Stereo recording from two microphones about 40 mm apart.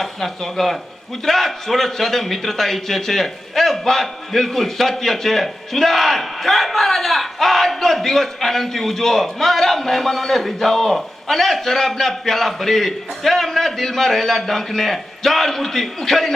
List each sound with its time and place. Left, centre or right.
0.0 s a man's voice: centre